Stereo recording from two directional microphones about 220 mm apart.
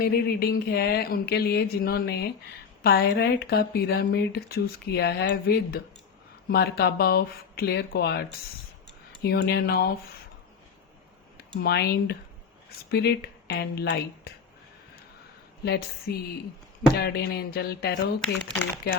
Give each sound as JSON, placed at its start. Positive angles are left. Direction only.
{"t": 0.0, "sound": "speech", "side_deg": 45}
{"t": 9.2, "sound": "speech", "side_deg": 45}
{"t": 11.3, "sound": "speech", "side_deg": 45}
{"t": 16.1, "sound": "speech", "side_deg": 45}